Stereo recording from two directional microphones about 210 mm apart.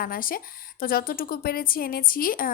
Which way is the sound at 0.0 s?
45° left (ahead or behind).